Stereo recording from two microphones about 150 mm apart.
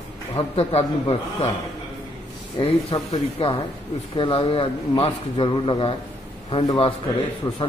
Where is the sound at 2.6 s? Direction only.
40° left (ahead or behind).